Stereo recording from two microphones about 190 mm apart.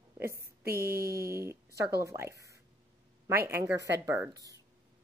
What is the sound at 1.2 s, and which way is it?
A woman's voice, 15° right (ahead or behind).